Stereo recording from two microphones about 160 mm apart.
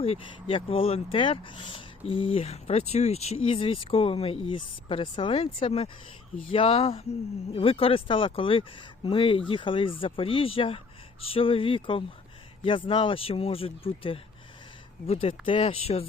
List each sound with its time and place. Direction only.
0.0 s speech: 35° left (ahead or behind)